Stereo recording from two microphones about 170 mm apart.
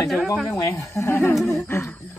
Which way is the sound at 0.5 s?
20° left (ahead or behind).